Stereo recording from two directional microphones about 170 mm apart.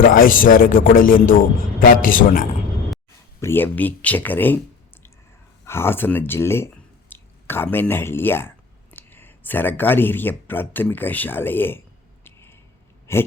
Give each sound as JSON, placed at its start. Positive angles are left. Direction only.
{"t": 0.0, "sound": "a man's voice", "side_deg": 55}
{"t": 3.4, "sound": "speech", "side_deg": 10}
{"t": 5.6, "sound": "speech", "side_deg": 15}
{"t": 12.2, "sound": "a sound", "side_deg": 15}